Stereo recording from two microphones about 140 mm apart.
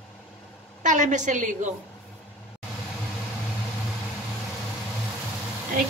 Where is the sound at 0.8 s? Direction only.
60° right (ahead or behind).